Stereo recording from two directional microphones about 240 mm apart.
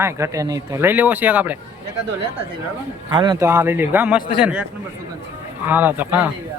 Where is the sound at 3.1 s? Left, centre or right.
Centre.